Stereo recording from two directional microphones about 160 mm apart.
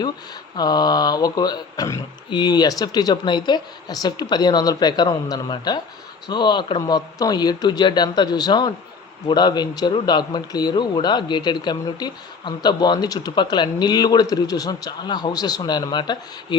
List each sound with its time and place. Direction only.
0.5 s speech: 25° left (ahead or behind)